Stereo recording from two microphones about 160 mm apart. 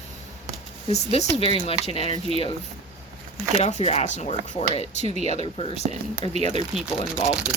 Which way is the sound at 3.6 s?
45° left (ahead or behind).